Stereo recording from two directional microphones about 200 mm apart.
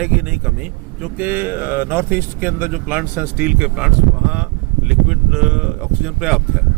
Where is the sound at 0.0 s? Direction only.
5° right (ahead or behind).